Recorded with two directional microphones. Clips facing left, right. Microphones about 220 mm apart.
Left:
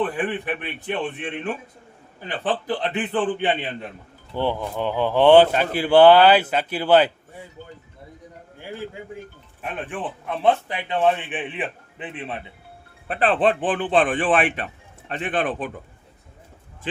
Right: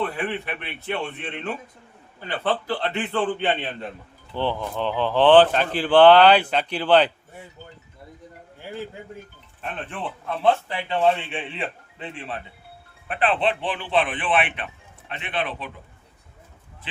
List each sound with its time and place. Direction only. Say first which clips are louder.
0.0 s speech: left 3 dB; 15° left (ahead or behind)
9.6 s speech: left 2 dB; 10° left (ahead or behind)
13.1 s a man's voice: left 3 dB; 40° left (ahead or behind)
16.9 s a man's voice: left 10 dB; 45° left (ahead or behind)